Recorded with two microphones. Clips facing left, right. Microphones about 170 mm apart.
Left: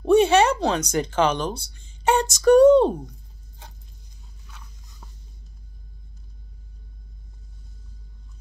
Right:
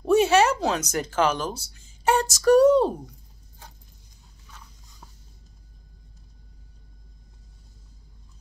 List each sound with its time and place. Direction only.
0.0 s speech: 5° right (ahead or behind)